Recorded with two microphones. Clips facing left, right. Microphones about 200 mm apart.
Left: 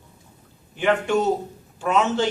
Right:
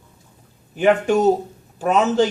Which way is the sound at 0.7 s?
40° right (ahead or behind).